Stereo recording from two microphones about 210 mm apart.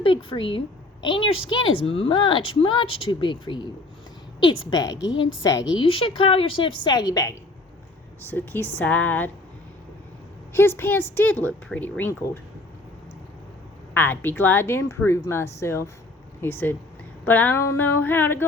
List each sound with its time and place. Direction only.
0.0 s a woman's voice: 25° left (ahead or behind)
4.7 s speech: 20° left (ahead or behind)
5.1 s a woman's voice: 65° left (ahead or behind)
5.4 s a woman's voice: 20° left (ahead or behind)
10.5 s speech: 10° left (ahead or behind)
13.9 s speech: 10° left (ahead or behind)